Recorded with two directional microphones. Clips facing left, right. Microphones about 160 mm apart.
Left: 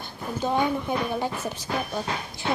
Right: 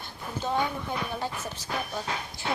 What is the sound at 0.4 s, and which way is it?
A woman's voice, 15° left (ahead or behind).